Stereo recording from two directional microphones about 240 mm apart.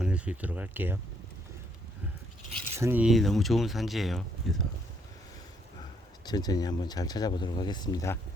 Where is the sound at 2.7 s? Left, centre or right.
Centre.